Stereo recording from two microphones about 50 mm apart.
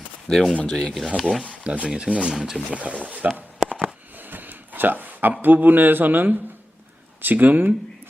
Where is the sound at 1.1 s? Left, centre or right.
Centre.